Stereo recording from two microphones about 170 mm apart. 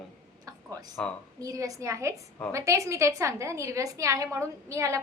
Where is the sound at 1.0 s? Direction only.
5° left (ahead or behind).